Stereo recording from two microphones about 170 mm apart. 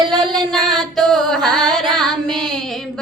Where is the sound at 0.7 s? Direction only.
Centre (ahead or behind).